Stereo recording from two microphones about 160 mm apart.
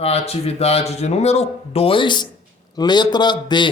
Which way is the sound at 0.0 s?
40° left (ahead or behind).